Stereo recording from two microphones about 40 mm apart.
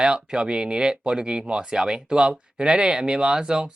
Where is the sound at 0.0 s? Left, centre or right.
Right.